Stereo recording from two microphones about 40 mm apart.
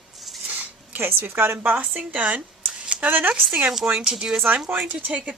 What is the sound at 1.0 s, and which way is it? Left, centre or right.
Speech, right.